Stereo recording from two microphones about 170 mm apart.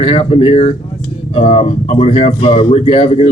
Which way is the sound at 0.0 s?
30° left (ahead or behind).